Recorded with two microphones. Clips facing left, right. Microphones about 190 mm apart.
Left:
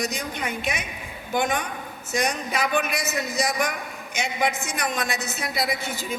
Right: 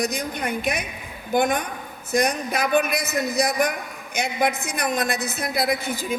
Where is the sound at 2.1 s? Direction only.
60° right (ahead or behind).